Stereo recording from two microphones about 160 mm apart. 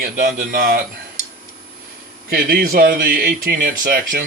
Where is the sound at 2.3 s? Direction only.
70° right (ahead or behind).